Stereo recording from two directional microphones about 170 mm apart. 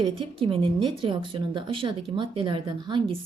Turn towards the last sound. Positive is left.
turn(degrees=-25)  # may be behind; listen again after turning